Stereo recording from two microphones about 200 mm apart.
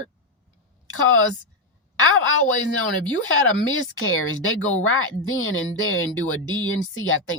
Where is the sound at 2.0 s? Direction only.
85° left.